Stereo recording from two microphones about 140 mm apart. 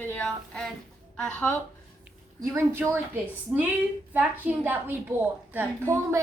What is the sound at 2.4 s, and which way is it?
A woman's voice, 20° right (ahead or behind).